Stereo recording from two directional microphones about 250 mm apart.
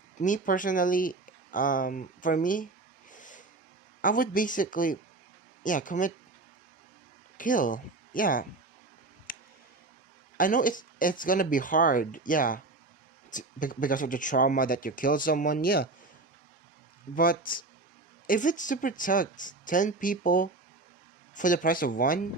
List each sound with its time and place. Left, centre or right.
0.2 s speech: left
3.1 s a sound: left
4.0 s speech: left
7.3 s speech: left
10.3 s speech: left
18.3 s speech: left